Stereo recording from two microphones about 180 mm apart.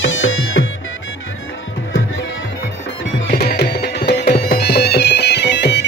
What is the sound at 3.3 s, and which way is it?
Music, 60° left (ahead or behind).